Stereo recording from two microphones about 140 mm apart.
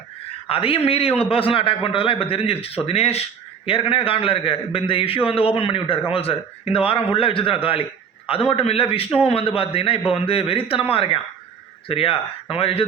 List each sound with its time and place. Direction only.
0.4 s a man's voice: 40° left (ahead or behind)